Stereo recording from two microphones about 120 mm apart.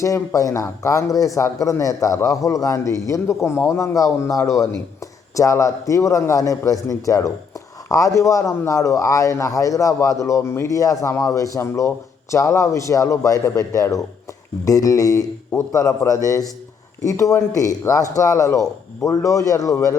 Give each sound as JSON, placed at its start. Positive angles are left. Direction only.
{"t": 0.0, "sound": "speech", "side_deg": 25}